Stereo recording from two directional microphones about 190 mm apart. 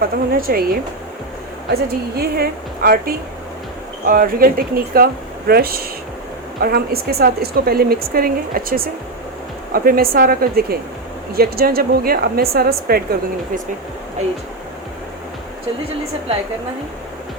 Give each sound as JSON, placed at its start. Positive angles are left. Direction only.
{"t": 0.0, "sound": "speech", "side_deg": -50}
{"t": 2.1, "sound": "speech", "side_deg": -55}